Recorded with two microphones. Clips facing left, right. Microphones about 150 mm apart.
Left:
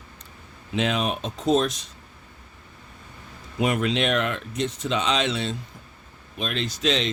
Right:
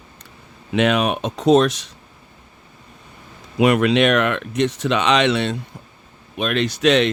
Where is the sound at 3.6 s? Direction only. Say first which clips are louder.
Right 8 dB; 80° right.